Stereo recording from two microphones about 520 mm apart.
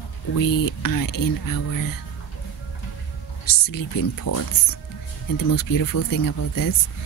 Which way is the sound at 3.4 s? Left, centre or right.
Left.